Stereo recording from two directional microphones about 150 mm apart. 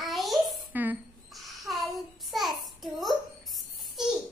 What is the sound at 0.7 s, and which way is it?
Speech, 10° right (ahead or behind).